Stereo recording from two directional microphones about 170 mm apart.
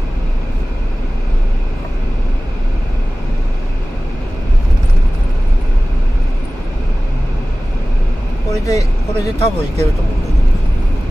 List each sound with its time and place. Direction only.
8.5 s speech: 20° left (ahead or behind)